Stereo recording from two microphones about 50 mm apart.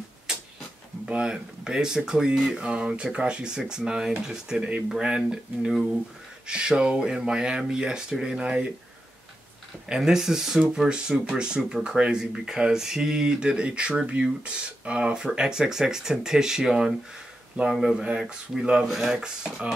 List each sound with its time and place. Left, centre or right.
1.0 s speech: centre
9.8 s speech: centre